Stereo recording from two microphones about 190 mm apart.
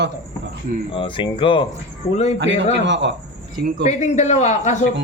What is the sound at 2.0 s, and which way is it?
Speech, 35° left (ahead or behind).